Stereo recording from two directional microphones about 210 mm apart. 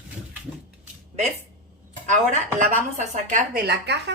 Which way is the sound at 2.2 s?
35° right (ahead or behind).